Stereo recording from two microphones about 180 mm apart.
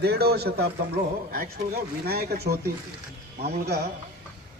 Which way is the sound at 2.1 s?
60° right (ahead or behind).